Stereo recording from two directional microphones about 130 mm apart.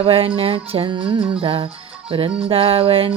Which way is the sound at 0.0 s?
45° right (ahead or behind).